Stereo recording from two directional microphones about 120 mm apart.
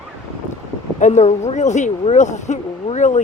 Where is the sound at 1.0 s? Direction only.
75° left (ahead or behind).